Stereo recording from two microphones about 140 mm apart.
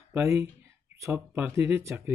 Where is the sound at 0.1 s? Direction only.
20° right (ahead or behind).